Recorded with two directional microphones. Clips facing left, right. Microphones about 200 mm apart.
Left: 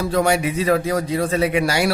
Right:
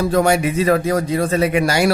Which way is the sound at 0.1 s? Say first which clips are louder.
Right 3 dB; 45° right (ahead or behind).